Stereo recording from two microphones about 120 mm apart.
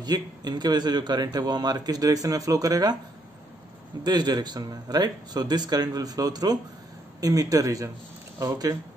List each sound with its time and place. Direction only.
0.0 s a man's voice: 35° right (ahead or behind)
4.0 s a man's voice: 35° right (ahead or behind)